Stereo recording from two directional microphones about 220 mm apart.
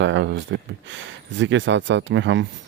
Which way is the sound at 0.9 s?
55° right (ahead or behind).